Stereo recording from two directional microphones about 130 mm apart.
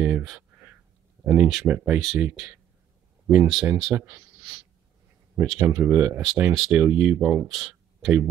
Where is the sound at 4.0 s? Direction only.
15° right (ahead or behind).